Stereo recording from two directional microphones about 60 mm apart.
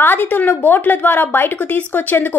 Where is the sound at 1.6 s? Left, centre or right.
Left.